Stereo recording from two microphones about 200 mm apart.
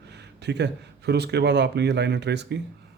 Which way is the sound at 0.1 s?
55° right (ahead or behind).